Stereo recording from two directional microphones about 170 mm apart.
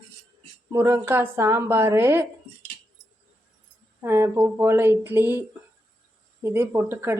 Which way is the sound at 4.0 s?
15° right (ahead or behind).